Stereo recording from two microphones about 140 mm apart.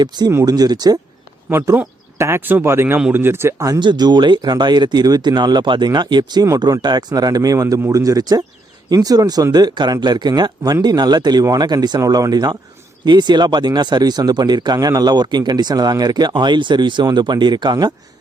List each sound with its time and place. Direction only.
0.0 s speech: 30° right (ahead or behind)
1.5 s speech: 15° right (ahead or behind)